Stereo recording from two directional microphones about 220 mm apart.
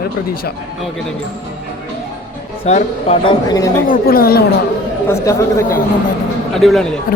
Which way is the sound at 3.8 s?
40° left (ahead or behind).